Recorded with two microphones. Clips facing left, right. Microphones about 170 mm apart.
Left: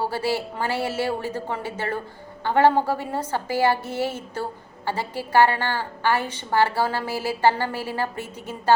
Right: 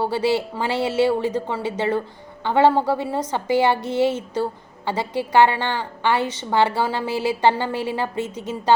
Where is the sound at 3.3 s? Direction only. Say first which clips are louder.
Right 2 dB; 20° right (ahead or behind).